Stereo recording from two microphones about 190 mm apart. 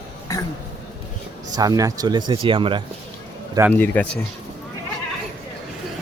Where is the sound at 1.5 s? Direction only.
20° right (ahead or behind).